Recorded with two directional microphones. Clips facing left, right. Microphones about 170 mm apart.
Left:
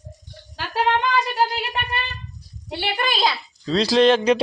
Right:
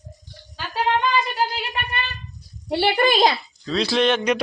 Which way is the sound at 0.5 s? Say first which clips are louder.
Left 1 dB; 75° left (ahead or behind).